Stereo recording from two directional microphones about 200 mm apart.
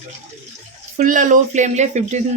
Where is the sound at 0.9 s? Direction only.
40° right (ahead or behind).